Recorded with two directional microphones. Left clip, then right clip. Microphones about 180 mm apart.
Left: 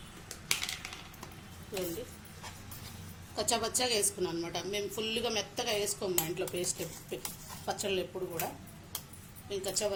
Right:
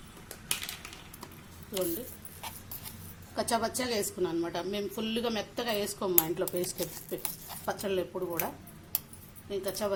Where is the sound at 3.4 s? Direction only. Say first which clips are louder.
Right 1 dB; 45° right (ahead or behind).